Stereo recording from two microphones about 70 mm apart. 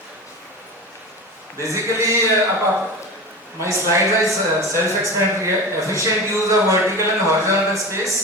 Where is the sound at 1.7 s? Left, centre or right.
Right.